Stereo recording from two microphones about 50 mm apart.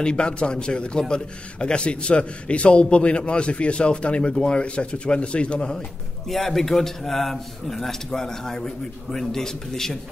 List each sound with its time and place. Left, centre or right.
0.0 s a man's voice: centre
6.2 s a man's voice: centre